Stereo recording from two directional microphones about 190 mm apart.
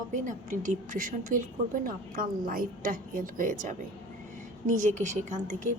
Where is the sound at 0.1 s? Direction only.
40° right (ahead or behind).